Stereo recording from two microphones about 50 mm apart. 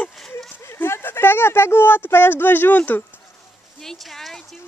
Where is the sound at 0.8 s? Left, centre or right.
Left.